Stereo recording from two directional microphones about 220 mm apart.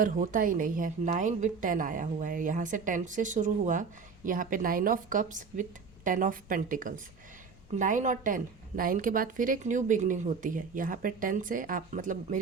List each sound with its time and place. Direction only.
0.0 s a woman's voice: 40° right (ahead or behind)